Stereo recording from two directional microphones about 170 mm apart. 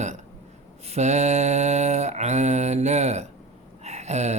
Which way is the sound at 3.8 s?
40° right (ahead or behind).